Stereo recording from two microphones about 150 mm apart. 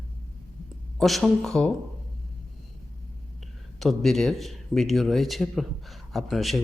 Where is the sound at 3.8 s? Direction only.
Centre (ahead or behind).